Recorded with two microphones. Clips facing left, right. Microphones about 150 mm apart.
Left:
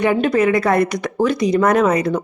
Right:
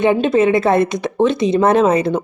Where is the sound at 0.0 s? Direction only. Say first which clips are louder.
Right 2 dB; 25° right (ahead or behind).